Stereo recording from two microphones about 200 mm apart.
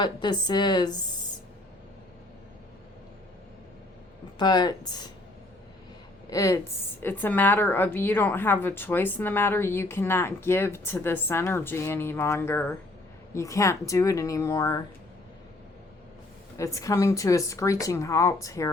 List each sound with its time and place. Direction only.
0.0 s a woman's voice: 20° left (ahead or behind)
4.4 s a woman's voice: 20° left (ahead or behind)
6.3 s a woman's voice: 15° left (ahead or behind)
16.6 s a woman's voice: 15° left (ahead or behind)